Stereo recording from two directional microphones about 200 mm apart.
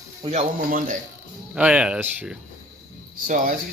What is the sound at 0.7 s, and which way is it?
Speech, 45° right (ahead or behind).